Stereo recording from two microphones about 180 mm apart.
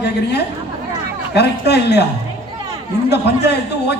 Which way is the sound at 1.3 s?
65° left (ahead or behind).